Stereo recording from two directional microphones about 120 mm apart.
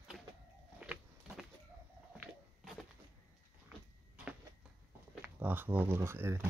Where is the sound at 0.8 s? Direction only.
5° right (ahead or behind).